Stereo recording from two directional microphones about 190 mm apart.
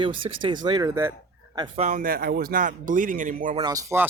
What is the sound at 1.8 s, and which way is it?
Speech, 45° right (ahead or behind).